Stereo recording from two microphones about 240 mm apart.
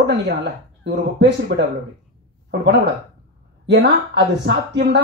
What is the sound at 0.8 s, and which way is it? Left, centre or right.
Speech, right.